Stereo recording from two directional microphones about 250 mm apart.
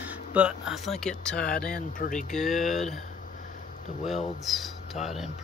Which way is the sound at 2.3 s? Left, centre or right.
Centre.